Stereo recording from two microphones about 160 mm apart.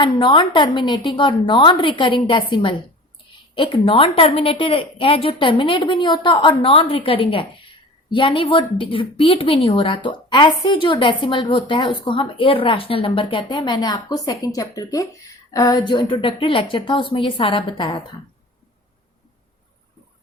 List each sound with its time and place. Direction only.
0.0 s a woman's voice: 30° left (ahead or behind)